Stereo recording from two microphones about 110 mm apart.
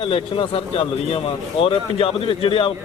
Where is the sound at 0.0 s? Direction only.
55° left (ahead or behind).